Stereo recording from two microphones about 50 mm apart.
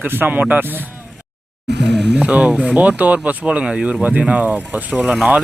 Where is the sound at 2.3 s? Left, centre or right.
Right.